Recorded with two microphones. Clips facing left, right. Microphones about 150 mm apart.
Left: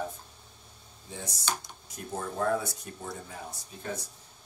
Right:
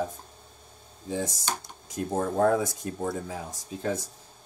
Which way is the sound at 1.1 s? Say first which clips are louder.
Right 5 dB; 90° right.